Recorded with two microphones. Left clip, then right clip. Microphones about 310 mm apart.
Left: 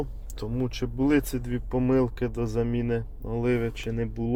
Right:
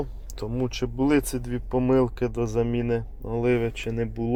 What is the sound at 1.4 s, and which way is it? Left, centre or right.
Speech, centre.